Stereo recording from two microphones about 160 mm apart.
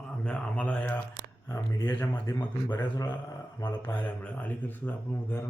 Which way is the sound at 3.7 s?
10° left (ahead or behind).